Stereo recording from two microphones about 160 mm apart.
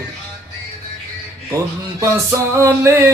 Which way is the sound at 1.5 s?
20° right (ahead or behind).